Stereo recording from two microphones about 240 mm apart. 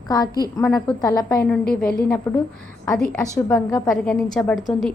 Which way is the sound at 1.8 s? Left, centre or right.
Left.